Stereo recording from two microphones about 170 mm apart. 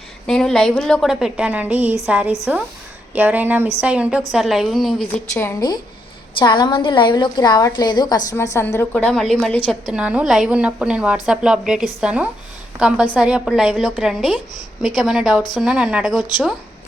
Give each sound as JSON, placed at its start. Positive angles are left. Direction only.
{"t": 0.3, "sound": "a woman's voice", "side_deg": 0}
{"t": 5.3, "sound": "a woman's voice", "side_deg": 15}
{"t": 16.1, "sound": "a woman's voice", "side_deg": 25}